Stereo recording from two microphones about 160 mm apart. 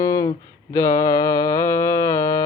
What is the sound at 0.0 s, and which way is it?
Mantra, 20° left (ahead or behind).